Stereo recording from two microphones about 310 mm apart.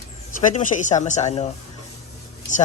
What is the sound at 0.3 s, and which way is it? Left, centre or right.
Speech, left.